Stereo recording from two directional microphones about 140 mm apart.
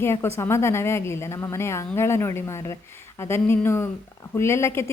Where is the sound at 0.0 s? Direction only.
20° left (ahead or behind).